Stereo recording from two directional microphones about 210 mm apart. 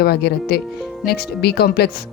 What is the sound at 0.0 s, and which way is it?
Speech, 50° left (ahead or behind).